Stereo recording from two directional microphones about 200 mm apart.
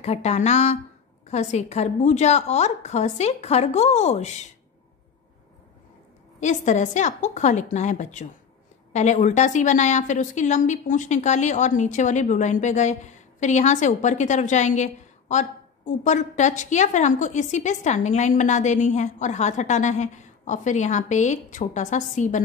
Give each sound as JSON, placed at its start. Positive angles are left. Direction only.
{"t": 0.0, "sound": "a woman's voice", "side_deg": 35}
{"t": 6.4, "sound": "a woman's voice", "side_deg": 35}